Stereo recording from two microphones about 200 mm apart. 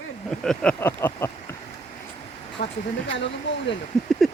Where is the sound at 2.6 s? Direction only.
35° left (ahead or behind).